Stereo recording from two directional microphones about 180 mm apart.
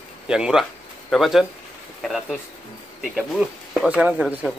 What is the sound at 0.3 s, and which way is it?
Speech, 5° right (ahead or behind).